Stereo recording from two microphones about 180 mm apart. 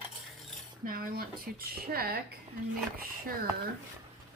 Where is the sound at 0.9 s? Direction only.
55° right (ahead or behind).